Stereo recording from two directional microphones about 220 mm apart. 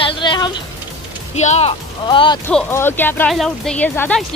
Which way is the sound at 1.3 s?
30° left (ahead or behind).